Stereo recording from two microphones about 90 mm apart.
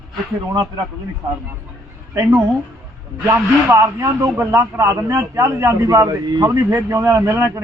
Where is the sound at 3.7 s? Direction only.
35° right (ahead or behind).